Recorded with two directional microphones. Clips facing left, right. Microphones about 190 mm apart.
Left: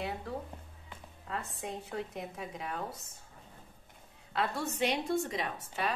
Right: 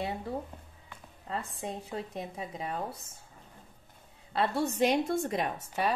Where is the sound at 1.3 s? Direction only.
30° right (ahead or behind).